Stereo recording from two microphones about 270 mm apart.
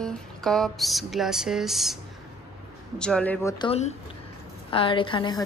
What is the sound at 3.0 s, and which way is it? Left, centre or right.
Speech, centre.